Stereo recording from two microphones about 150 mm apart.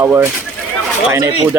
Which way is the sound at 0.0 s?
15° right (ahead or behind).